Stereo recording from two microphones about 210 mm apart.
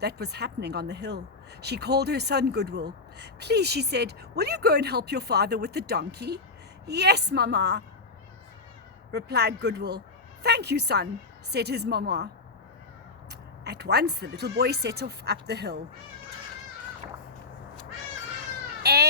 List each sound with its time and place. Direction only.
0.0 s speech: 50° right (ahead or behind)
9.1 s speech: 50° right (ahead or behind)
13.7 s speech: 50° right (ahead or behind)
18.8 s baby cry: 50° right (ahead or behind)